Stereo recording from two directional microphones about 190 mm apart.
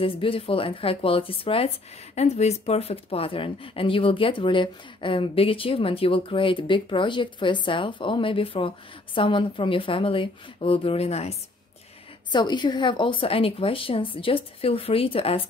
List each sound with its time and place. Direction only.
0.0 s speech: 30° left (ahead or behind)
12.3 s speech: 25° left (ahead or behind)